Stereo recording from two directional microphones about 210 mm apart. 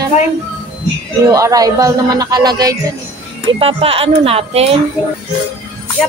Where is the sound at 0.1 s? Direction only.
30° left (ahead or behind).